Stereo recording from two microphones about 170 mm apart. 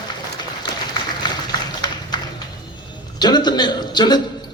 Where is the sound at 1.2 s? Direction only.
25° left (ahead or behind).